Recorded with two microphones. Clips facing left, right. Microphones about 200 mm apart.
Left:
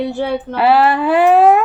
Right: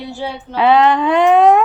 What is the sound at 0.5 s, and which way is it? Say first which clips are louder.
Speech: right 1 dB; 5° left (ahead or behind).